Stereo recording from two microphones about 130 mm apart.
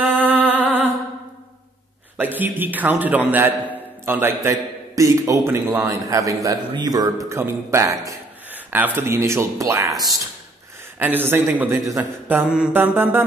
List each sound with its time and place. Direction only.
0.0 s music: 15° right (ahead or behind)
2.1 s a man's voice: 15° right (ahead or behind)
11.0 s a man's voice: 15° right (ahead or behind)